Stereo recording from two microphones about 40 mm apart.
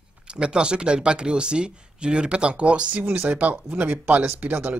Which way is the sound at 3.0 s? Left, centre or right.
Right.